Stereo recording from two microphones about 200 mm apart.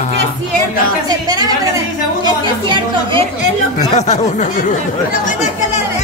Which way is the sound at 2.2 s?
20° right (ahead or behind).